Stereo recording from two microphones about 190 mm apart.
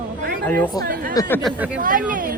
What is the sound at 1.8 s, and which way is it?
Speech, 45° right (ahead or behind).